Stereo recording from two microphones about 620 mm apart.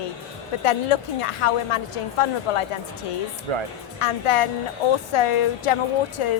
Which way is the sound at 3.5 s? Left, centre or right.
Right.